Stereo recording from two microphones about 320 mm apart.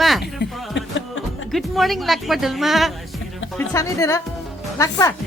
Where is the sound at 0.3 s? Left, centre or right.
Left.